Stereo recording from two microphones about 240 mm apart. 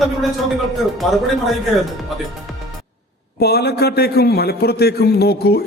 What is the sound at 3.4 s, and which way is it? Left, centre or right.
A man's voice, left.